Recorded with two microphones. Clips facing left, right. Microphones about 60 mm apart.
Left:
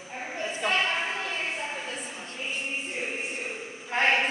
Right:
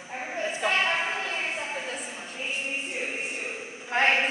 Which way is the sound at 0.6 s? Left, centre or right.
Centre.